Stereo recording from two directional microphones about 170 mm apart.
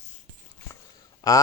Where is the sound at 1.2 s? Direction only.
20° left (ahead or behind).